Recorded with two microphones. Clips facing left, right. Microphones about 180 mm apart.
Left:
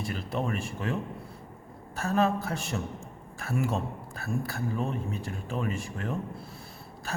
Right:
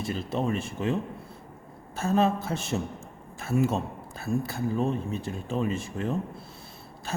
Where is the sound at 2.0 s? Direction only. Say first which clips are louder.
Right 2 dB; 25° right (ahead or behind).